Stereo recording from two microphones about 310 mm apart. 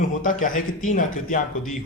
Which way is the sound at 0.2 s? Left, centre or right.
Left.